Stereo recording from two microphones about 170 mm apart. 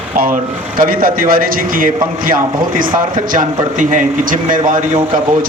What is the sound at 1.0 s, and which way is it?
A man's voice, 55° right (ahead or behind).